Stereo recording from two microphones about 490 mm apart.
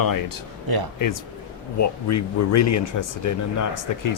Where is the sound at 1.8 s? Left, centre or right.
Left.